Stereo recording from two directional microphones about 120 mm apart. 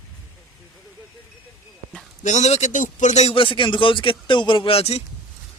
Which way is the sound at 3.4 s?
45° left (ahead or behind).